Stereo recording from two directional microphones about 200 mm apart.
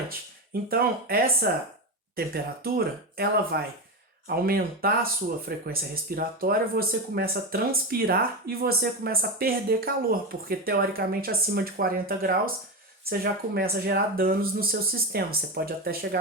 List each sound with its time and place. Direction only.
0.7 s speech: 50° right (ahead or behind)